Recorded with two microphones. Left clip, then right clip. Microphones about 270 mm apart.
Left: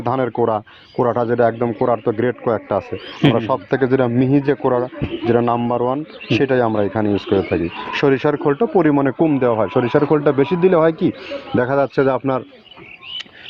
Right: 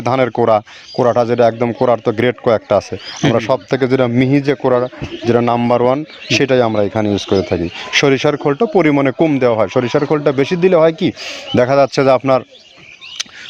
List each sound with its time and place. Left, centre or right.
0.0 s speech: right